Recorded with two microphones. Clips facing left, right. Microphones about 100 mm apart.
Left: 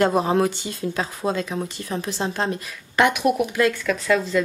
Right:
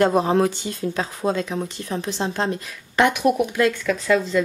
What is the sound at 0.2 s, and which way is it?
Speech, centre (ahead or behind).